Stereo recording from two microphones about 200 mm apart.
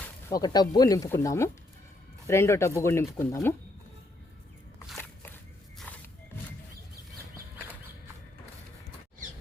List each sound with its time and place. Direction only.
0.3 s speech: 20° left (ahead or behind)